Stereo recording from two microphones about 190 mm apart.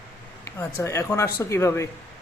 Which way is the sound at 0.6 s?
15° left (ahead or behind).